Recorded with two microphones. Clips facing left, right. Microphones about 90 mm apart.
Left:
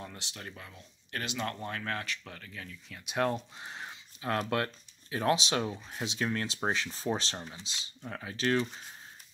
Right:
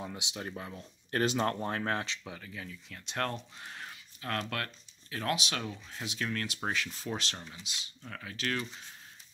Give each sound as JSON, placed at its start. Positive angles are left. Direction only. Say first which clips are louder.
{"t": 0.0, "sound": "speech", "louder": "right 4 dB", "side_deg": -15}
{"t": 2.2, "sound": "speech", "louder": "right 2 dB", "side_deg": -5}
{"t": 3.1, "sound": "speech", "louder": "left 5 dB", "side_deg": 10}
{"t": 3.5, "sound": "a sound", "louder": "left 2 dB", "side_deg": 20}
{"t": 5.1, "sound": "speech", "louder": "left 5 dB", "side_deg": 25}